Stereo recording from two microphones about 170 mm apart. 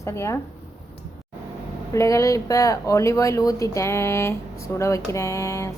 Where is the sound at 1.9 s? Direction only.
20° left (ahead or behind).